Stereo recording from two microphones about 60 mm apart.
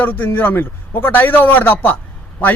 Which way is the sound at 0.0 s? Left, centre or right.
Left.